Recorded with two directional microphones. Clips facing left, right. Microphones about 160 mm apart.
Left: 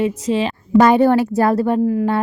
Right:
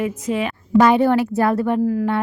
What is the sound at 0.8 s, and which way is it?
A woman's voice, 40° left (ahead or behind).